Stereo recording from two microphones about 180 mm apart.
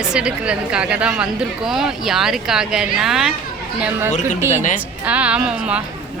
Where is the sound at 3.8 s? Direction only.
10° right (ahead or behind).